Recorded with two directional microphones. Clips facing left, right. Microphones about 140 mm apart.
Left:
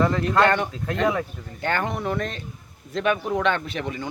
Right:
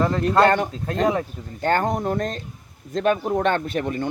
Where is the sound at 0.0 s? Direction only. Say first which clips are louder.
Right 2 dB; 40° right (ahead or behind).